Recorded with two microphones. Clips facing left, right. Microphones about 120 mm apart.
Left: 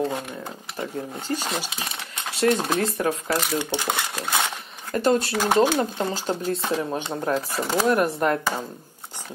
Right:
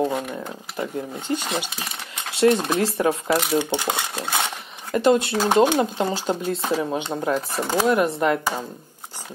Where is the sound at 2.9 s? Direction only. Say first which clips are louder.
Right 3 dB; 25° right (ahead or behind).